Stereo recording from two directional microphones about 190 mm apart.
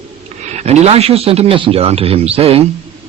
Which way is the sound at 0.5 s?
35° right (ahead or behind).